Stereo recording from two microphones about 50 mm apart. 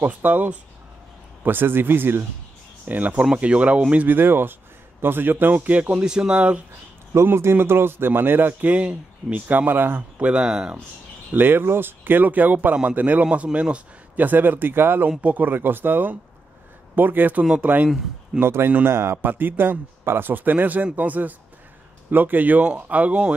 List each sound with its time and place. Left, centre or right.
0.0 s speech: right
2.8 s a man's voice: right
4.2 s speech: right
6.0 s speech: centre
7.2 s speech: right
8.6 s a man's voice: right
9.3 s speech: right
10.1 s a man's voice: right
11.3 s a man's voice: right
14.2 s speech: right
18.4 s a man's voice: right